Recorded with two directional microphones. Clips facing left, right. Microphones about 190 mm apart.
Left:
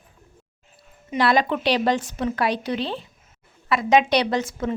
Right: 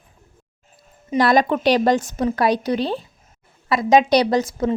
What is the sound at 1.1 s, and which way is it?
A woman's voice, 45° right (ahead or behind).